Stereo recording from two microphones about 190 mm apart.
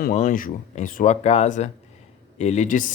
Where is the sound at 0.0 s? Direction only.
40° left (ahead or behind).